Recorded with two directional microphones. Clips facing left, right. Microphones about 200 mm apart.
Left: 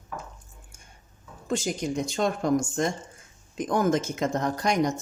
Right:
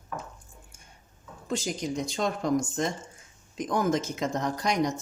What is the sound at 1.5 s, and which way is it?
Speech, 50° left (ahead or behind).